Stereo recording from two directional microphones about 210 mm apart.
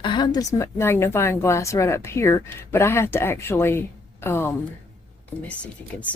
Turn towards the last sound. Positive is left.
turn(degrees=5)  # may be behind; listen again after turning